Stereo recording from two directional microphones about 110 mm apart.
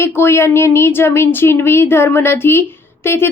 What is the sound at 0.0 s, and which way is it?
Speech, 20° left (ahead or behind).